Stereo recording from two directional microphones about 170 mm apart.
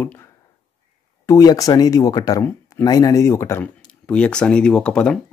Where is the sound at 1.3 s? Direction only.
20° left (ahead or behind).